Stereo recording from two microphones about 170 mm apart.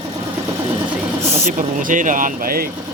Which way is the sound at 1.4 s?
50° right (ahead or behind).